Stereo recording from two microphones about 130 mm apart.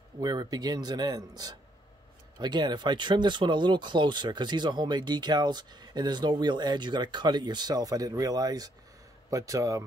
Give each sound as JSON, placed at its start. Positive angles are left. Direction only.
{"t": 0.2, "sound": "speech", "side_deg": -30}